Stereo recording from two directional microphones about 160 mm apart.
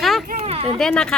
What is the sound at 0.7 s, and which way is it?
Speech, 5° left (ahead or behind).